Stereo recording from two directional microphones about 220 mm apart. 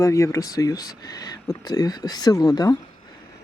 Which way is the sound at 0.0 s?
15° left (ahead or behind).